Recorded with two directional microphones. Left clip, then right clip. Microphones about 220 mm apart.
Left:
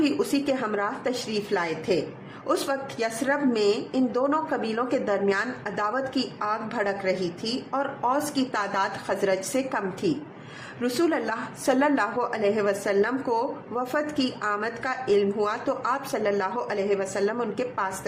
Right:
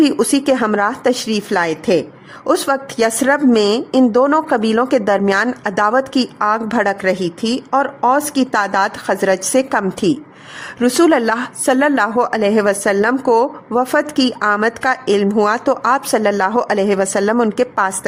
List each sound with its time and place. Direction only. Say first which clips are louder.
0.0 s a woman's voice: right 11 dB; 50° right (ahead or behind)